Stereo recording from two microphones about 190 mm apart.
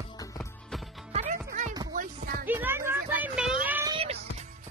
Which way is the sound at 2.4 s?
10° right (ahead or behind).